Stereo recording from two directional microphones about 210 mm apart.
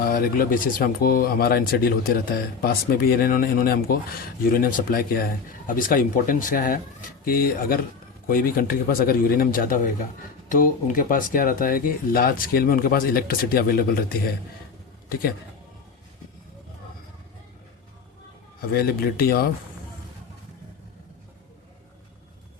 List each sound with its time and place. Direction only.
0.0 s speech: 45° left (ahead or behind)
18.7 s speech: 45° left (ahead or behind)